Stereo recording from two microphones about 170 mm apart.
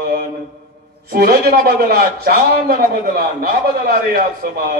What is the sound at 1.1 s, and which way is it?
A man's voice, 60° right (ahead or behind).